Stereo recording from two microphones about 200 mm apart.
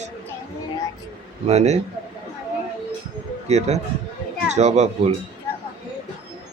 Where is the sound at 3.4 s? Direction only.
35° right (ahead or behind).